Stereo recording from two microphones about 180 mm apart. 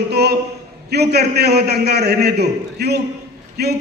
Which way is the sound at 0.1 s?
65° right (ahead or behind).